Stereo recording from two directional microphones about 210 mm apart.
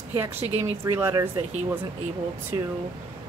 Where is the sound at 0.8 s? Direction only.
10° right (ahead or behind).